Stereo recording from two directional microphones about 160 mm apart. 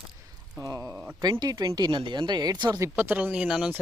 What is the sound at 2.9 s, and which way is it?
Speech, 10° right (ahead or behind).